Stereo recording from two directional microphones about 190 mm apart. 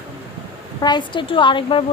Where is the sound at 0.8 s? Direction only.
25° left (ahead or behind).